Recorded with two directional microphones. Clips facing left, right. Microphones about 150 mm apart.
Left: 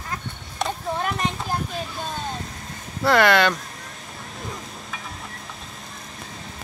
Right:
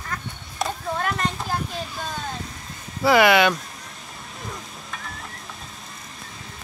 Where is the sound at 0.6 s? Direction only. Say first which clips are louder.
Even; centre (ahead or behind).